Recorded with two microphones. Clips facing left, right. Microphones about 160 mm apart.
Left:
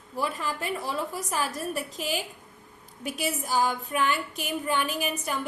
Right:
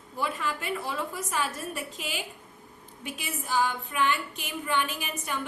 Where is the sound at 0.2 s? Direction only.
35° left (ahead or behind).